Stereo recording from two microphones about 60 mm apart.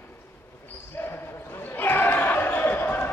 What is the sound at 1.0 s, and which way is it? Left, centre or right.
Basketball bounce, left.